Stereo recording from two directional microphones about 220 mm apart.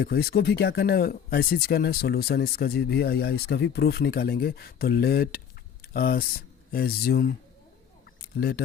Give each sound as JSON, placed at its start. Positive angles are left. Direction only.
{"t": 0.0, "sound": "speech", "side_deg": 45}